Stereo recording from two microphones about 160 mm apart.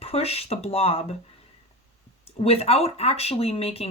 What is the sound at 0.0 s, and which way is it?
Speech, 40° left (ahead or behind).